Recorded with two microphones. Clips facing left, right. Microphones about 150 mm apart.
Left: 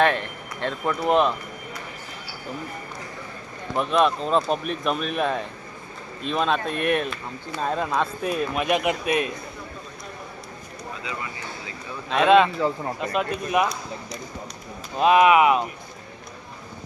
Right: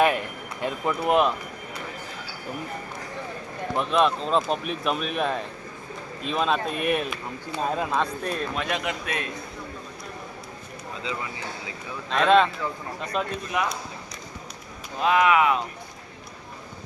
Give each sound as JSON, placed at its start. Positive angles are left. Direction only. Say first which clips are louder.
{"t": 0.0, "sound": "speech", "louder": "left 1 dB", "side_deg": -10}
{"t": 3.8, "sound": "a man's voice", "louder": "left 2 dB", "side_deg": 0}
{"t": 12.1, "sound": "speech", "louder": "left 2 dB", "side_deg": 5}
{"t": 12.5, "sound": "a man's voice", "louder": "left 7 dB", "side_deg": 35}
{"t": 13.5, "sound": "a man's voice", "louder": "left 5 dB", "side_deg": 20}
{"t": 14.9, "sound": "speech", "louder": "left 4 dB", "side_deg": 20}